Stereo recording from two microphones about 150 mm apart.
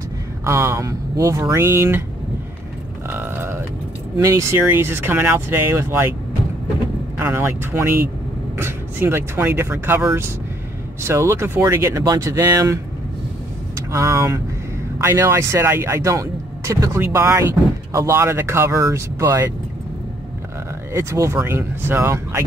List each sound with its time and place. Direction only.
0.4 s speech: 15° right (ahead or behind)
3.1 s a sound: 15° right (ahead or behind)
4.2 s speech: 20° right (ahead or behind)
7.2 s speech: 15° right (ahead or behind)
13.9 s speech: 20° right (ahead or behind)
20.9 s speech: 20° right (ahead or behind)